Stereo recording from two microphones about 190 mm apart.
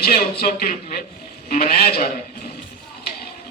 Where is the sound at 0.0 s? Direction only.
55° left (ahead or behind).